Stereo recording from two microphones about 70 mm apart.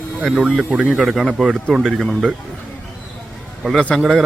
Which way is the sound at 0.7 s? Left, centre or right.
Centre.